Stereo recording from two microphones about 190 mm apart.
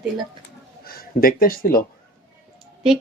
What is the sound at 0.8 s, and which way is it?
Speech, 50° left (ahead or behind).